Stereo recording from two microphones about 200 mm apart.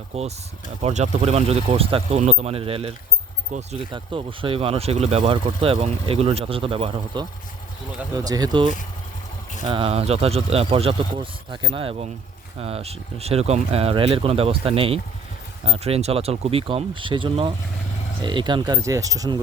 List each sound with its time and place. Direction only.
0.1 s speech: 30° right (ahead or behind)
3.9 s speech: 25° right (ahead or behind)